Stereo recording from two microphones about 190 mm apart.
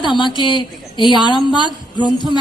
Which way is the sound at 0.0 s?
25° left (ahead or behind).